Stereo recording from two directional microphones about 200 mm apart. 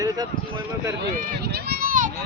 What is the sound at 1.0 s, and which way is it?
Run, 55° right (ahead or behind).